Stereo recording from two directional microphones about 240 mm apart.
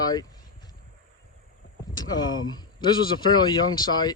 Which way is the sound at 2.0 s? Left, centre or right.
Centre.